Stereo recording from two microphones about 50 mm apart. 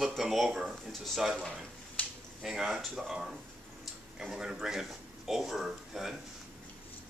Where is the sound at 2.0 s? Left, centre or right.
Left.